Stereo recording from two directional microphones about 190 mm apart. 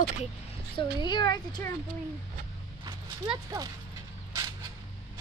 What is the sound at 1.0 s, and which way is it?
Speech, 20° left (ahead or behind).